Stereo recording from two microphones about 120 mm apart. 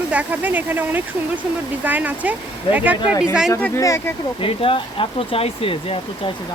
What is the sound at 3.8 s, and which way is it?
Speech, 25° left (ahead or behind).